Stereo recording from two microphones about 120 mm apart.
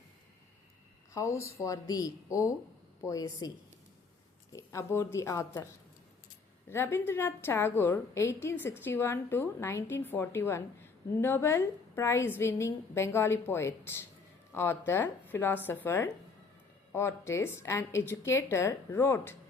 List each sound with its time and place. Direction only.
1.1 s a woman's voice: 25° left (ahead or behind)
4.5 s a woman's voice: 25° left (ahead or behind)
6.7 s a woman's voice: 20° left (ahead or behind)